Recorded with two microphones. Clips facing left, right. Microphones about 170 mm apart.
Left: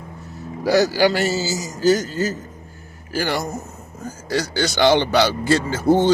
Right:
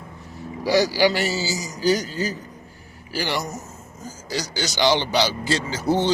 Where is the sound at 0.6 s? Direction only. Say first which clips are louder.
Left 2 dB; 45° left (ahead or behind).